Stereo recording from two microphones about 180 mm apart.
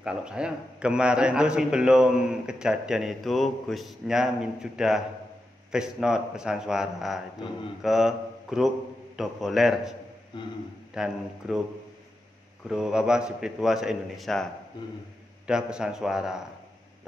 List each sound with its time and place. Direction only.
0.0 s a man's voice: 5° right (ahead or behind)
10.3 s a man's voice: 25° left (ahead or behind)
11.0 s a man's voice: 5° right (ahead or behind)
12.6 s a man's voice: 5° right (ahead or behind)